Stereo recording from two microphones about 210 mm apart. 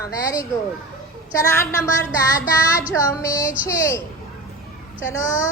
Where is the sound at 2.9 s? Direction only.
15° left (ahead or behind).